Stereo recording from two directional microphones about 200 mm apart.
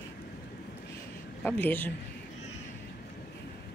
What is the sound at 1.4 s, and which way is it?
Speech, 10° left (ahead or behind).